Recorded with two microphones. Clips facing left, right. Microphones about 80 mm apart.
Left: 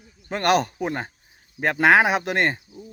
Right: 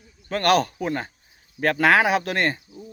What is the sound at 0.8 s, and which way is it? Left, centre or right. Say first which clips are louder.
Speech: right 1 dB; centre.